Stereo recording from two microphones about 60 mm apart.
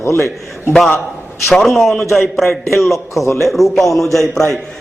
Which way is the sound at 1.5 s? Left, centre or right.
Centre.